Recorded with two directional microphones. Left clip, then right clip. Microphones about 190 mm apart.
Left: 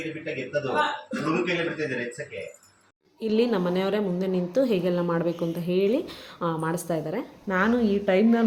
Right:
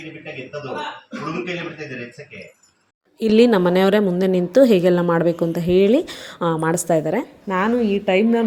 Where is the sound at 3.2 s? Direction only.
50° right (ahead or behind).